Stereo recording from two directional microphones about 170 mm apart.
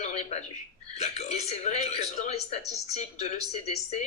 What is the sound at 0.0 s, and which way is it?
Speech, 35° left (ahead or behind).